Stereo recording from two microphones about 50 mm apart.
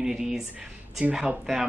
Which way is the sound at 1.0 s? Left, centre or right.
Right.